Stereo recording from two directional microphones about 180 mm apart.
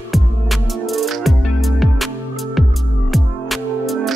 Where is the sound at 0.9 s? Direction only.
Centre (ahead or behind).